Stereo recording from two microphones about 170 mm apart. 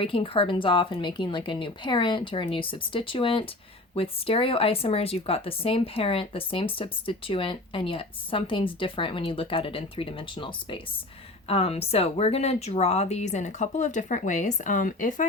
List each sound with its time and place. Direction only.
0.0 s speech: 30° left (ahead or behind); by 15.3 s 50° left (ahead or behind)